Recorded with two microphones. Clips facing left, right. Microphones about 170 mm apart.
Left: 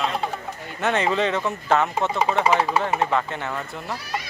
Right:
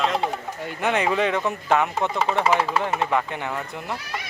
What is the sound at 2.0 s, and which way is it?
Speech, 15° left (ahead or behind).